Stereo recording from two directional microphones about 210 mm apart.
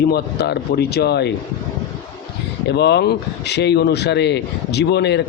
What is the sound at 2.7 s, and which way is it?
A man's voice, 55° left (ahead or behind).